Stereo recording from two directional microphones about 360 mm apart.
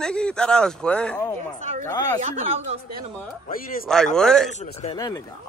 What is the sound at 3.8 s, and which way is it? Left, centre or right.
Speech, centre.